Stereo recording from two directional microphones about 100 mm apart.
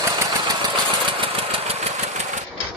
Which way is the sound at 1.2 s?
75° right (ahead or behind).